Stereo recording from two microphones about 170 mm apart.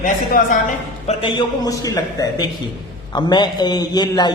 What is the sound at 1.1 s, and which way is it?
A woman's voice, 30° left (ahead or behind).